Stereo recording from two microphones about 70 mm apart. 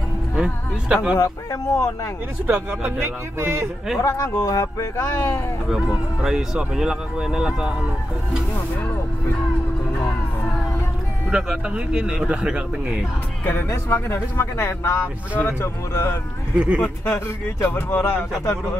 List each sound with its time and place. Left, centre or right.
0.4 s speech: centre
1.1 s speech: left
2.4 s speech: right
4.0 s speech: left
5.8 s speech: centre
11.3 s speech: centre
13.5 s speech: left
16.5 s speech: centre
17.1 s speech: left